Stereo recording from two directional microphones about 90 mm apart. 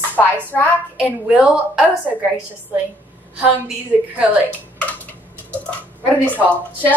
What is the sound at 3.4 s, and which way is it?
Speech, 15° right (ahead or behind).